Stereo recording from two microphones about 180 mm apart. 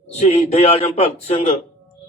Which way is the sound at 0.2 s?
35° left (ahead or behind).